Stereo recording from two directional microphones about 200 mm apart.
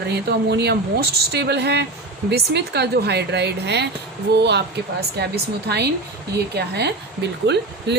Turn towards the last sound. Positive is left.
turn(degrees=-55)  # may be behind; listen again after turning